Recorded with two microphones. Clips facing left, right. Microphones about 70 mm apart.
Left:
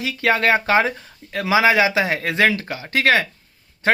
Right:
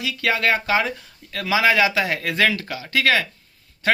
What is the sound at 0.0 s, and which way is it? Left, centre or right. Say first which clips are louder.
Speech: left 3 dB; left.